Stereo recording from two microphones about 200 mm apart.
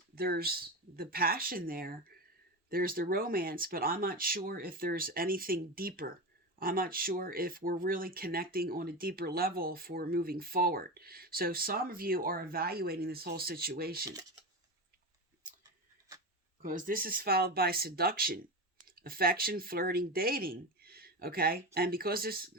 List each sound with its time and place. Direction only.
0.2 s speech: 50° right (ahead or behind)
16.6 s speech: 45° right (ahead or behind)